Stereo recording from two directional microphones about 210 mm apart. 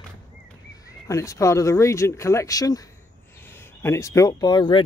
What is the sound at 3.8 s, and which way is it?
Speech, 15° left (ahead or behind).